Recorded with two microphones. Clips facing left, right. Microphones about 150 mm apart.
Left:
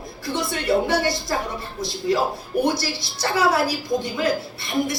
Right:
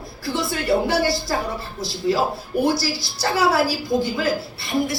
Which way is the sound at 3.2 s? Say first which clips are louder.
Right 1 dB; 30° right (ahead or behind).